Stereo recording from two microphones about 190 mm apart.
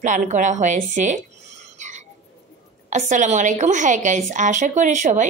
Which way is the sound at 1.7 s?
40° right (ahead or behind).